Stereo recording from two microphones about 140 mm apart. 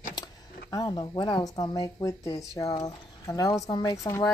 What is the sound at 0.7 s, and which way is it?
Speech, 30° left (ahead or behind).